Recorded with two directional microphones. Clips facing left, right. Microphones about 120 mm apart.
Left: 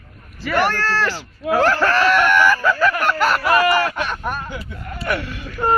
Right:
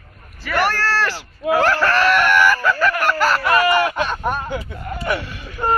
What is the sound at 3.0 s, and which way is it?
Speech, centre (ahead or behind).